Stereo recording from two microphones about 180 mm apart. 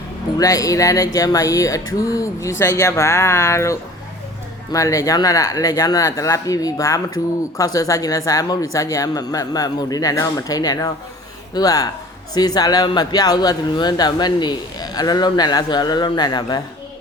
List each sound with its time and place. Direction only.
0.3 s speech: 20° left (ahead or behind)